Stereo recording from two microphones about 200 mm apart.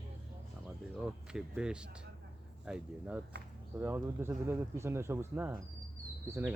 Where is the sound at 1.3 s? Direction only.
5° right (ahead or behind).